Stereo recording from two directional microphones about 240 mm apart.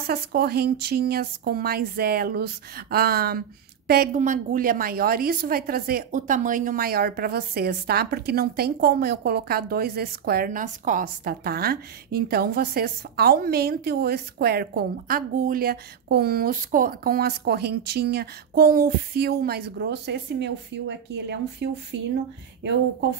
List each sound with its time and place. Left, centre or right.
0.0 s a woman's voice: right